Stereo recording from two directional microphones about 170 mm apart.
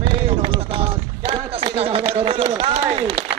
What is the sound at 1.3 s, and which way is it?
Speech, 35° right (ahead or behind).